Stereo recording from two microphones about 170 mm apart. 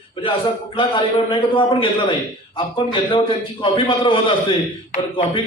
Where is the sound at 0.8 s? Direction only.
30° left (ahead or behind).